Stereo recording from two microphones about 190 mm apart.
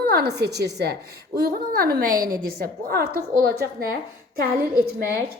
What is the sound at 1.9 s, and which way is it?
A woman's voice, 50° right (ahead or behind).